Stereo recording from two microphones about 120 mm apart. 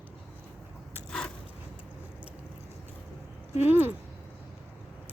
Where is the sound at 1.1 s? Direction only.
5° left (ahead or behind).